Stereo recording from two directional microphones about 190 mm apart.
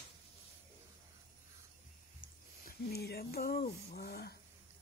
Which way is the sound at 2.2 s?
50° left (ahead or behind).